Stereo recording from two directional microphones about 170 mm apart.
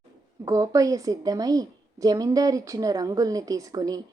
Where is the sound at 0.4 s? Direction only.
20° right (ahead or behind).